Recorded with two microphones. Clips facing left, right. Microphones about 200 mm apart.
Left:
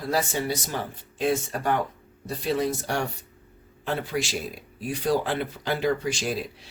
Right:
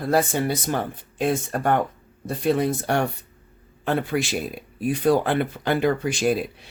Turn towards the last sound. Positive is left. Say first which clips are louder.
# right 7 dB
turn(degrees=-55)  # may be behind; listen again after turning